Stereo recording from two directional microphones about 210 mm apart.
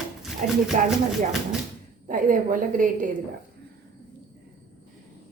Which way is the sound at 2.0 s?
40° right (ahead or behind).